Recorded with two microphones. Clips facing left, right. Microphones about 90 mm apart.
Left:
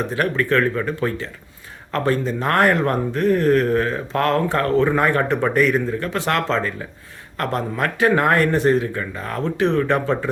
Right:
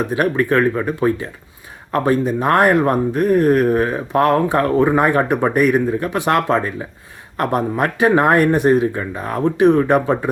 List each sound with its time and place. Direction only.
0.0 s speech: 15° right (ahead or behind)